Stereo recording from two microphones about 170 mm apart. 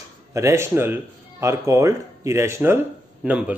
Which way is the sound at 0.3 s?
15° right (ahead or behind).